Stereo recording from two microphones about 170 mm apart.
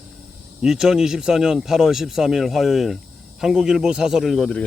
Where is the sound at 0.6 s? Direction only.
5° right (ahead or behind).